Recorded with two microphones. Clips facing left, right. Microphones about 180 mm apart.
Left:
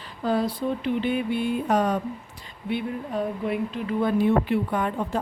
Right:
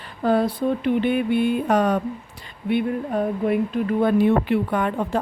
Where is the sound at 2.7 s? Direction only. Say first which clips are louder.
Right 6 dB; 55° right (ahead or behind).